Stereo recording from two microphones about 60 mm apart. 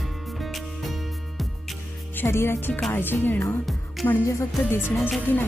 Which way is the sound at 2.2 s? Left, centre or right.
Left.